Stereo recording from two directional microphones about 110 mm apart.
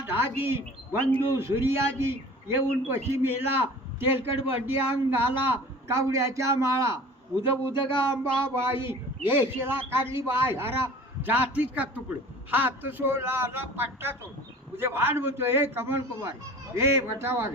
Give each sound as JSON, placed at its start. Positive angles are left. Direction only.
{"t": 0.0, "sound": "a man's voice", "side_deg": -20}
{"t": 7.7, "sound": "a sound", "side_deg": 45}
{"t": 8.1, "sound": "a man's voice", "side_deg": -20}